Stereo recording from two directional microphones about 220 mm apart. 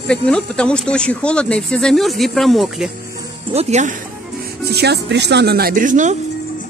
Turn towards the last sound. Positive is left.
turn(degrees=-35)  # may be behind; listen again after turning